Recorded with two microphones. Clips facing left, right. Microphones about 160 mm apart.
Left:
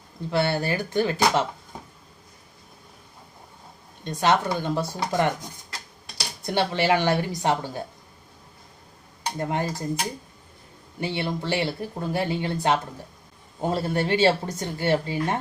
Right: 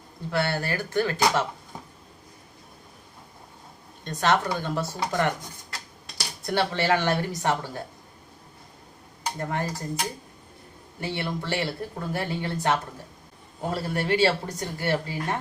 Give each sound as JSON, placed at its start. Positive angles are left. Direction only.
{"t": 0.3, "sound": "a woman's voice", "side_deg": 20}
{"t": 4.0, "sound": "speech", "side_deg": 15}
{"t": 6.4, "sound": "speech", "side_deg": 20}
{"t": 9.4, "sound": "a woman's voice", "side_deg": 20}
{"t": 11.0, "sound": "a woman's voice", "side_deg": 20}